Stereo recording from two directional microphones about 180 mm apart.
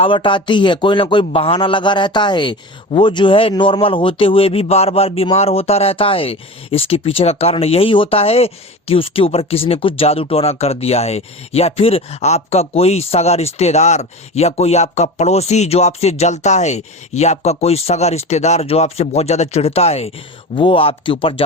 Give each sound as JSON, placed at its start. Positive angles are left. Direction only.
{"t": 0.0, "sound": "a man's voice", "side_deg": 30}